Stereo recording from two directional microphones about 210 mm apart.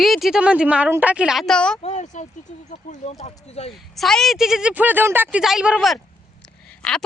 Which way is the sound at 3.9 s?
Centre (ahead or behind).